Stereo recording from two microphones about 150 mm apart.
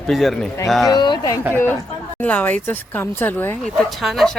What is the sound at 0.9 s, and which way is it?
Speech, 30° left (ahead or behind).